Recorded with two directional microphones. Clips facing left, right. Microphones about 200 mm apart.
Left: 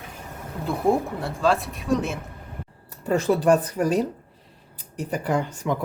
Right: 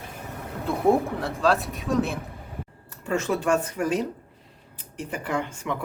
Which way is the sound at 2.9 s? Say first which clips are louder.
Left 4 dB; 35° left (ahead or behind).